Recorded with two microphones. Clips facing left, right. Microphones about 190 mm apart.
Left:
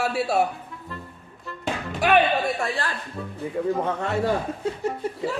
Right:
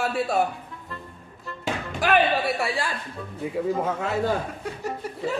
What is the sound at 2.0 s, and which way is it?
Speech, centre (ahead or behind).